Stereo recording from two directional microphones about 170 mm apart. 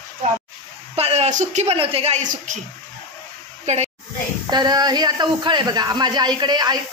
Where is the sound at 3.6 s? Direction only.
40° right (ahead or behind).